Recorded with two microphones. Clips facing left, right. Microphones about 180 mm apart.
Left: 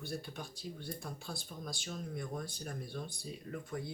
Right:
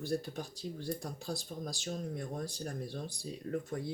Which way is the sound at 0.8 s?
40° right (ahead or behind).